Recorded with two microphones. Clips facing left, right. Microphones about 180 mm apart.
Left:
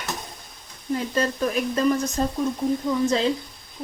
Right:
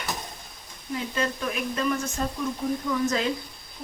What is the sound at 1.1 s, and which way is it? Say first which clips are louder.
A woman's voice: left 5 dB; 40° left (ahead or behind).